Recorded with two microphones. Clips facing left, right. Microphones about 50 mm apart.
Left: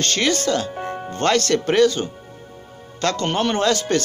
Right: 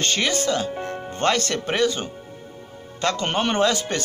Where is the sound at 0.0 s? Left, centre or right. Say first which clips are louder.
Left 2 dB; centre.